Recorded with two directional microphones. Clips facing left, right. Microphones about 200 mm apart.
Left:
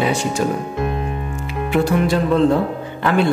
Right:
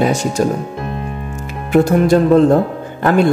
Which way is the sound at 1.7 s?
45° right (ahead or behind).